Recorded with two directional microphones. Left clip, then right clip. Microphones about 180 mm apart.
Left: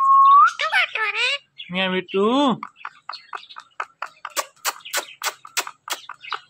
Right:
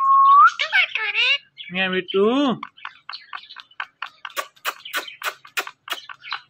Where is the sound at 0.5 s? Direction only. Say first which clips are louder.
Right 1 dB; 30° left (ahead or behind).